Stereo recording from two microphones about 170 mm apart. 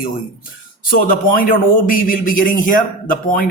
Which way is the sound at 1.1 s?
55° left (ahead or behind).